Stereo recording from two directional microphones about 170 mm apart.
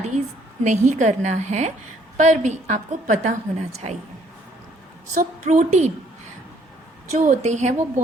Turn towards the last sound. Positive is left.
turn(degrees=-45)  # may be behind; listen again after turning